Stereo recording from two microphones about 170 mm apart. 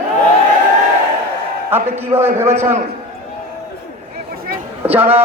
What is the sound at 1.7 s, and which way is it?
A man's voice, 15° right (ahead or behind).